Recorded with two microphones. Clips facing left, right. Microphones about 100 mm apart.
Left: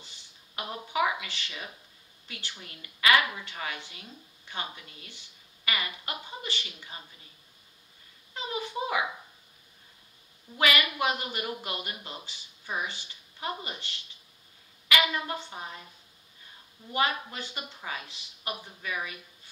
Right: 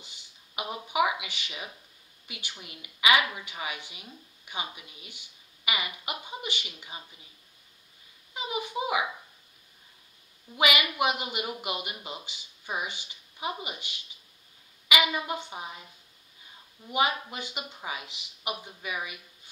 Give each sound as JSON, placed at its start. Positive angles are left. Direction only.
{"t": 0.0, "sound": "a sound", "side_deg": -15}
{"t": 2.2, "sound": "speech", "side_deg": -15}
{"t": 8.4, "sound": "speech", "side_deg": -15}
{"t": 10.6, "sound": "speech", "side_deg": -15}
{"t": 16.9, "sound": "speech", "side_deg": -15}